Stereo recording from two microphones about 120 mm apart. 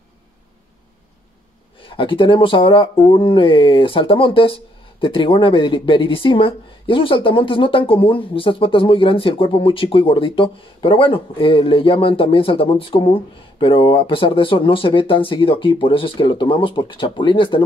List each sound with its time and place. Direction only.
1.8 s speech: 45° left (ahead or behind)